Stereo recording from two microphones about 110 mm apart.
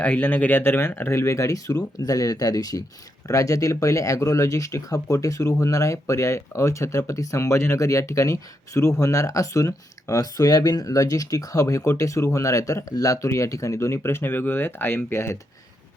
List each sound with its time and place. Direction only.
0.0 s speech: 10° left (ahead or behind)